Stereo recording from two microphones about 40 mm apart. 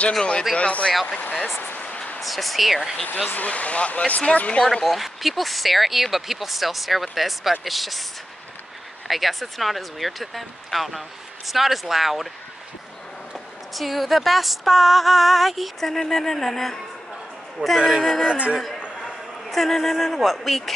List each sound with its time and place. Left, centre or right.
0.2 s speech: left
0.6 s speech: left
1.8 s a sound: left
2.1 s speech: centre
3.3 s speech: left
4.8 s speech: centre
13.3 s speech: centre
15.9 s a woman's voice: centre
18.3 s speech: right
19.5 s speech: centre